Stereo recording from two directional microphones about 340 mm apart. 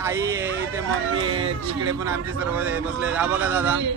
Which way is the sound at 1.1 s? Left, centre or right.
Right.